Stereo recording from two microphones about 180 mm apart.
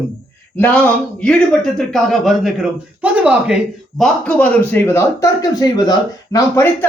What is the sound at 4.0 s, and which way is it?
Speech, 5° left (ahead or behind).